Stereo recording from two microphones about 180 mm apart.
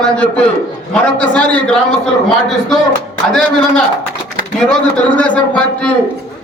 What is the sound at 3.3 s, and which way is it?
A man's voice, 5° left (ahead or behind).